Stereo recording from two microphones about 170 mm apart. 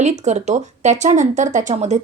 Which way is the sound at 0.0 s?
45° right (ahead or behind).